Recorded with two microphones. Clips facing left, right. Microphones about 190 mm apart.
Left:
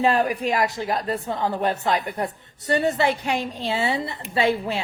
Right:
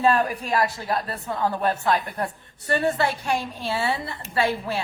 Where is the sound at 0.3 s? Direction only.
20° left (ahead or behind).